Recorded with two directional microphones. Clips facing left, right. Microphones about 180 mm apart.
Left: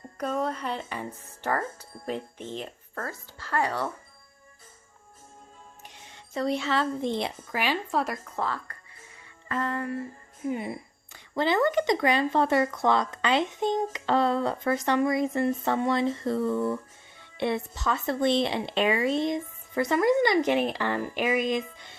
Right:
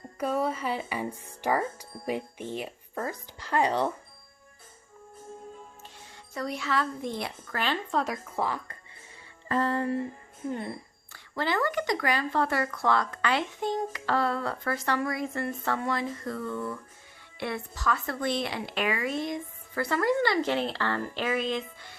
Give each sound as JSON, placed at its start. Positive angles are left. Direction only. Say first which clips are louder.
{"t": 0.2, "sound": "speech", "louder": "right 1 dB", "side_deg": -5}
{"t": 5.8, "sound": "speech", "louder": "even", "side_deg": 20}
{"t": 8.4, "sound": "speech", "louder": "right 1 dB", "side_deg": -15}
{"t": 9.5, "sound": "music", "louder": "right 3 dB", "side_deg": -35}
{"t": 10.4, "sound": "speech", "louder": "left 3 dB", "side_deg": 10}